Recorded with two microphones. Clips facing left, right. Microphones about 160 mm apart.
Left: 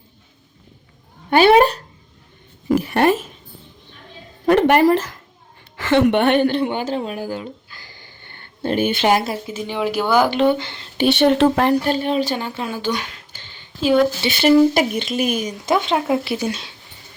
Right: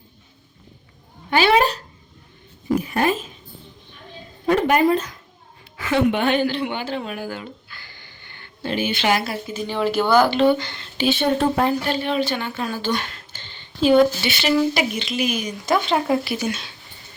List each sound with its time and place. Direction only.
1.4 s cat: 55° left (ahead or behind)
2.7 s a sound: 75° left (ahead or behind)
4.4 s a sound: 70° left (ahead or behind)
5.9 s speech: 70° left (ahead or behind); by 7.5 s 35° left (ahead or behind)
8.6 s a woman's voice: 50° left (ahead or behind)
9.2 s speech: 20° left (ahead or behind)
10.6 s speech: 25° left (ahead or behind)
10.9 s speech: 65° left (ahead or behind)
11.9 s speech: 40° left (ahead or behind)
12.6 s a sound: 15° left (ahead or behind)
14.3 s speech: 50° left (ahead or behind)
16.0 s speech: 5° left (ahead or behind)
16.2 s speech: 30° left (ahead or behind)